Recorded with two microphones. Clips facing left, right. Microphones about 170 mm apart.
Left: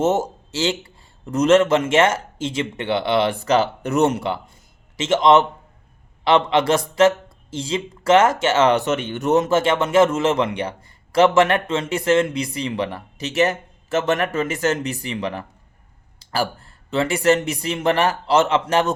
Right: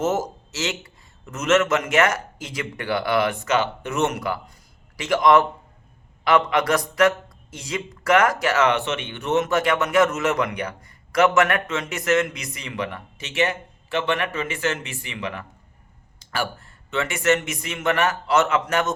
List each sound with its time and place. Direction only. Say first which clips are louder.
0.0 s speech: left 4 dB; 30° left (ahead or behind)